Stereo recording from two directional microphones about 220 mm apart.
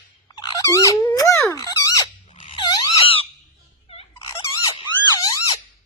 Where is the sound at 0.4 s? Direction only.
15° left (ahead or behind).